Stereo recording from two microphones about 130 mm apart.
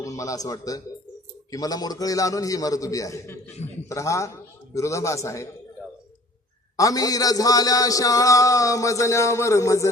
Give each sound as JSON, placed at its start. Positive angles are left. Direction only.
{"t": 0.0, "sound": "a man's voice", "side_deg": 25}
{"t": 6.7, "sound": "a man's voice", "side_deg": 25}